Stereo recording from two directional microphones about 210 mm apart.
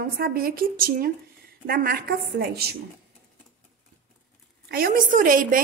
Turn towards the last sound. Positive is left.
turn(degrees=-40)  # may be behind; listen again after turning